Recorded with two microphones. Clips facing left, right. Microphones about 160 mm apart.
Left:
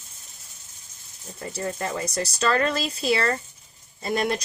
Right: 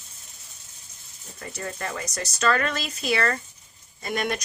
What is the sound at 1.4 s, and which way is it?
A woman's voice, 25° left (ahead or behind).